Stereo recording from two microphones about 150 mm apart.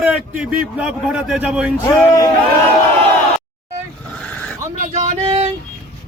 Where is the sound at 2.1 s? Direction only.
25° left (ahead or behind).